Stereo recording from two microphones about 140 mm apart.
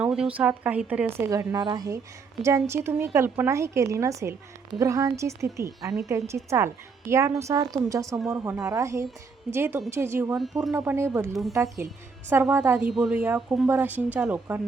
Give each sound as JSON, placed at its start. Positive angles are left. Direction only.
{"t": 0.0, "sound": "a sound", "side_deg": -5}
{"t": 0.3, "sound": "a woman's voice", "side_deg": -10}
{"t": 10.3, "sound": "speech", "side_deg": 0}
{"t": 10.8, "sound": "a woman's voice", "side_deg": -20}